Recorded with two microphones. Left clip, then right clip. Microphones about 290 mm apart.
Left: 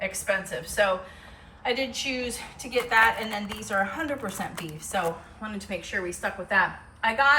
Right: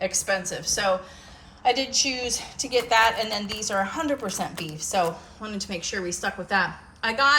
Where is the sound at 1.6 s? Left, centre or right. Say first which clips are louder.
Right 5 dB; centre.